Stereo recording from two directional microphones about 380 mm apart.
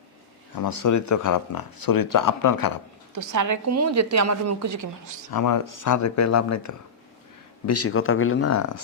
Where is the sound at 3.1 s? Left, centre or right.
Right.